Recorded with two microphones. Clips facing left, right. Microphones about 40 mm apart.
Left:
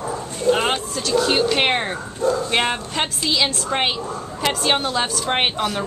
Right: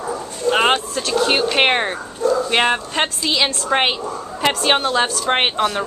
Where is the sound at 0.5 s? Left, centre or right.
Right.